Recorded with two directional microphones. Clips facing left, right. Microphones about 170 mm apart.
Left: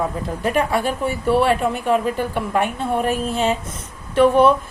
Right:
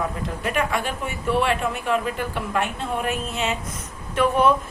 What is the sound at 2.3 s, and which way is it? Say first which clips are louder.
Speech: left 5 dB; 50° left (ahead or behind).